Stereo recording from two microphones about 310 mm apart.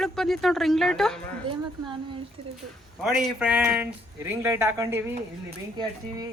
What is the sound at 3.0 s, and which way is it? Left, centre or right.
Speech, centre.